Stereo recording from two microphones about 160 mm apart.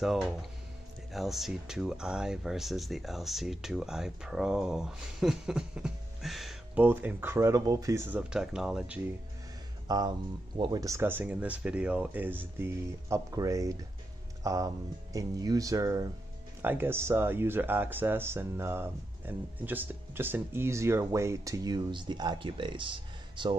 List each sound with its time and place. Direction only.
0.0 s speech: centre (ahead or behind)
6.8 s speech: 10° right (ahead or behind)
9.8 s speech: 25° right (ahead or behind)